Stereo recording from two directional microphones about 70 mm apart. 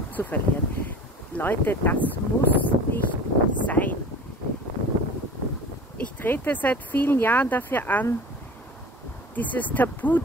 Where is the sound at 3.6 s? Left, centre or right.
Left.